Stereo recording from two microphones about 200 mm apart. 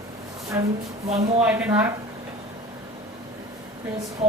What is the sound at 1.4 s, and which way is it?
Speech, 10° right (ahead or behind).